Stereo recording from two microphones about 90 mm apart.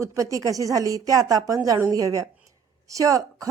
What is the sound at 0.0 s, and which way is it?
Speech, 35° right (ahead or behind).